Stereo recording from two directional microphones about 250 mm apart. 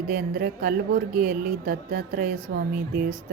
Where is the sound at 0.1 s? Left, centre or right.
Right.